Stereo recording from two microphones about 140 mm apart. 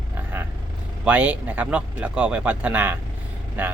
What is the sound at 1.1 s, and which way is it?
Speech, 10° right (ahead or behind).